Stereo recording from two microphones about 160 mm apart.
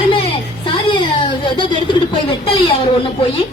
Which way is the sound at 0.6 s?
30° left (ahead or behind).